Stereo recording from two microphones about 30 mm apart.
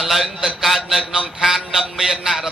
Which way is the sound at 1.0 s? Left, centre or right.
Right.